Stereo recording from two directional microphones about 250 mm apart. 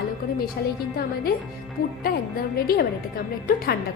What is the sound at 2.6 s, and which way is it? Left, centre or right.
A woman's voice, left.